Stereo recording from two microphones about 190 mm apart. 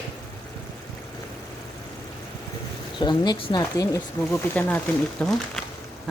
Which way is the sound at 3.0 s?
20° left (ahead or behind).